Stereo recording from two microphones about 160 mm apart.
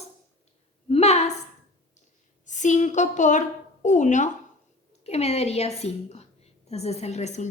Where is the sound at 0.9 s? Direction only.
40° left (ahead or behind).